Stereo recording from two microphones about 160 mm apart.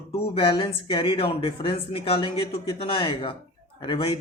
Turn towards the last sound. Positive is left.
turn(degrees=30)  # may be behind; listen again after turning